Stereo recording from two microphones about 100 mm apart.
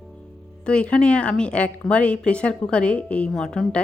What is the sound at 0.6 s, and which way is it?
A woman's voice, 10° left (ahead or behind).